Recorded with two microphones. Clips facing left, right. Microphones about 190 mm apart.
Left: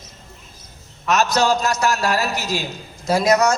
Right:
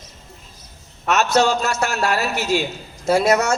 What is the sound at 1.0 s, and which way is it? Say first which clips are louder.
A man's voice: right 1 dB; 40° left (ahead or behind).